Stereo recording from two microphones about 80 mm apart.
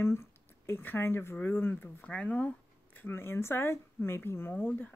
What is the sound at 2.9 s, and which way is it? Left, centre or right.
Speech, left.